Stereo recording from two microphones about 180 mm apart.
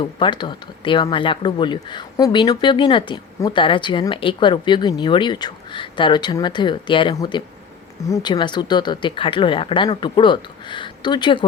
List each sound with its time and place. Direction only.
0.0 s speech: 25° left (ahead or behind)